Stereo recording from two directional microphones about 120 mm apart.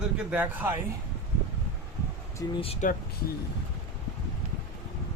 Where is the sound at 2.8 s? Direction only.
90° left.